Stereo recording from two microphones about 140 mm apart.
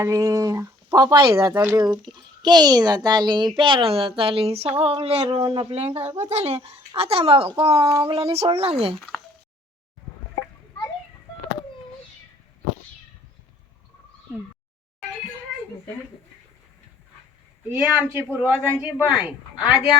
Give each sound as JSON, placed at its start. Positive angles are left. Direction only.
{"t": 0.0, "sound": "a child's voice", "side_deg": -20}
{"t": 15.5, "sound": "a sound", "side_deg": -5}
{"t": 17.7, "sound": "speech", "side_deg": -10}